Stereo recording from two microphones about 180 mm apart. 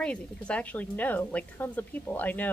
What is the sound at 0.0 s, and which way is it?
A woman's voice, 5° left (ahead or behind).